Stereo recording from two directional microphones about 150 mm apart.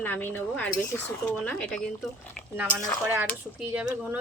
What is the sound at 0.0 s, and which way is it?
Speech, 10° left (ahead or behind).